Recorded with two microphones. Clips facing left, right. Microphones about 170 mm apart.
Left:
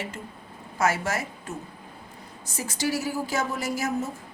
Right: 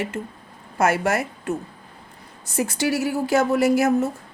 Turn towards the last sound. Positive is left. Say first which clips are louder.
# right 10 dB
turn(degrees=-65)  # may be behind; listen again after turning